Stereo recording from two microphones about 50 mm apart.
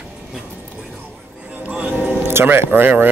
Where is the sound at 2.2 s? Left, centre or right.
Right.